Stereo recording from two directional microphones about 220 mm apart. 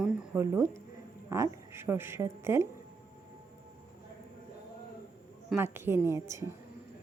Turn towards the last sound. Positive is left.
turn(degrees=-15)  # may be behind; listen again after turning